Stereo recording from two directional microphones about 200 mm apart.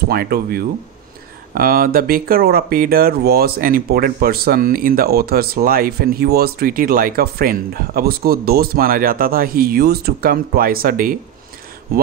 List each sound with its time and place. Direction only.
0.1 s speech: 50° right (ahead or behind)